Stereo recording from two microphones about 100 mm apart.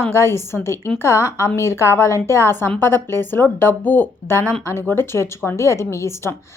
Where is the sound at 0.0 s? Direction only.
25° left (ahead or behind).